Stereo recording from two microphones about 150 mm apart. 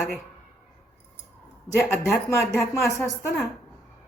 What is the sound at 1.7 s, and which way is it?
Speech, 15° left (ahead or behind).